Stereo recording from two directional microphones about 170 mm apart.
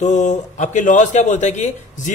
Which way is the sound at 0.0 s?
45° left (ahead or behind).